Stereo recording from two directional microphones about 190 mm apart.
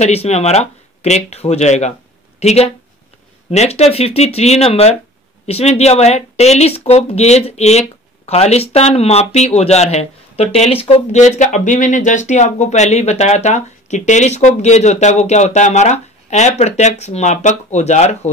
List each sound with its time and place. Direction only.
0.0 s speech: 35° left (ahead or behind)